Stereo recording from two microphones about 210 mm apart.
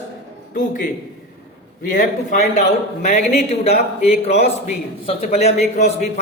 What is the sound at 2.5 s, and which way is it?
Speech, 35° left (ahead or behind).